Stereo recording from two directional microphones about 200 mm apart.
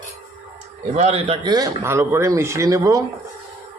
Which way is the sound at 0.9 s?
35° right (ahead or behind).